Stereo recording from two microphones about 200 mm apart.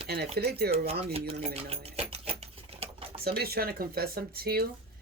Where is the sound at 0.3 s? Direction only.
50° right (ahead or behind).